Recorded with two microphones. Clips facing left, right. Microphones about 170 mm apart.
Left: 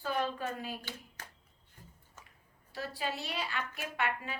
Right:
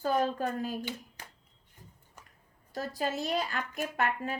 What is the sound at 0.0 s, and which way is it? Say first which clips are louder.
Speech: right 5 dB; 45° right (ahead or behind).